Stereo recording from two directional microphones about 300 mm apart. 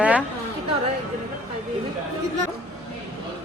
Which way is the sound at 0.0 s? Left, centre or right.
Centre.